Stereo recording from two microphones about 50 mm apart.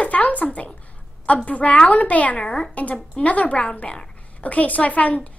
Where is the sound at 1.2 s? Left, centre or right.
Left.